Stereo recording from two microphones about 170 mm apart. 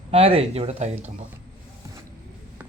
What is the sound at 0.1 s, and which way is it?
Speech, 35° right (ahead or behind).